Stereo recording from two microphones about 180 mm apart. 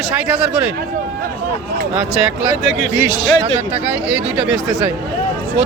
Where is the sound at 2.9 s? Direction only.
10° right (ahead or behind).